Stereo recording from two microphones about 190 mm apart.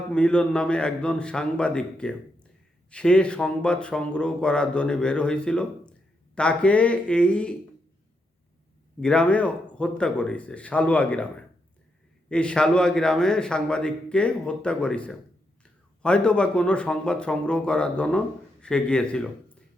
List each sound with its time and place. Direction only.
0.1 s speech: 5° left (ahead or behind)
9.0 s speech: 5° left (ahead or behind)
12.3 s speech: 5° left (ahead or behind)